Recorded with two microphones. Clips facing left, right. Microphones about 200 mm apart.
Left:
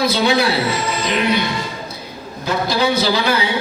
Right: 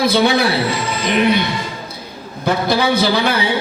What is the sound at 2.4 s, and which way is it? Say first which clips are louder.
A woman's voice: right 2 dB; 55° right (ahead or behind).